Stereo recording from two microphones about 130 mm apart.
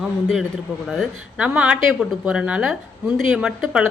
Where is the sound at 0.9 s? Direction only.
5° right (ahead or behind).